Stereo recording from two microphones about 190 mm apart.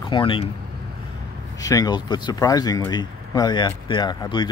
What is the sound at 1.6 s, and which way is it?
Speech, 20° left (ahead or behind).